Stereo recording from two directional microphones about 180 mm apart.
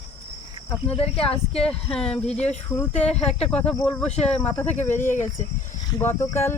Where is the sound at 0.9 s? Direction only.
35° left (ahead or behind).